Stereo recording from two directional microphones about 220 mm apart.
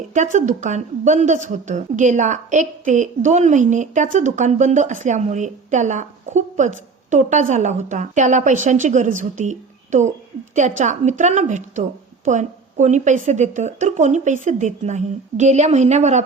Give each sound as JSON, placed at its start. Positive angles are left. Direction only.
{"t": 0.1, "sound": "a woman's voice", "side_deg": -35}